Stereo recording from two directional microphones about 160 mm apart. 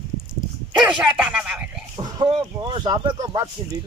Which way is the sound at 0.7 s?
5° right (ahead or behind).